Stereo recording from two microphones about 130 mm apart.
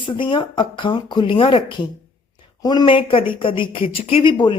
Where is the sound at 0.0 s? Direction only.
40° left (ahead or behind).